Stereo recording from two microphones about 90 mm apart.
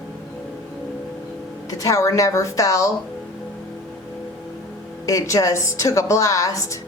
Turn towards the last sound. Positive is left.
turn(degrees=35)  # may be behind; listen again after turning